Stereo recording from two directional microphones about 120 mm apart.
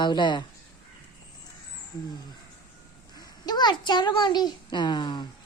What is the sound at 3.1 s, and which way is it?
A child's voice, 35° left (ahead or behind).